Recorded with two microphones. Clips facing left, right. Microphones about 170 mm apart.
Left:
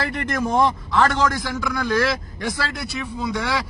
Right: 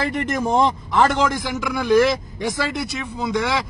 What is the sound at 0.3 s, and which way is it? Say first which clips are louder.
A man's voice: even; 25° right (ahead or behind).